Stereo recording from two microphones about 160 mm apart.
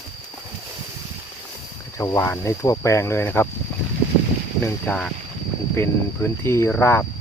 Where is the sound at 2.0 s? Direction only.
15° left (ahead or behind).